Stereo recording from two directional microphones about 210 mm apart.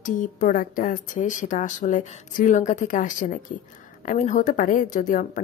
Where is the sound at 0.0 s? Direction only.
40° left (ahead or behind).